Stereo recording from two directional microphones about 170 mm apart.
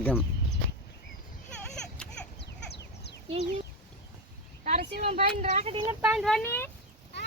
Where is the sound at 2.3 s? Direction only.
80° left.